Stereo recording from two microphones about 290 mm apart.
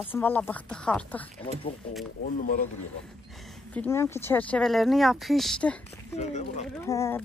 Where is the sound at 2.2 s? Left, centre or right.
Left.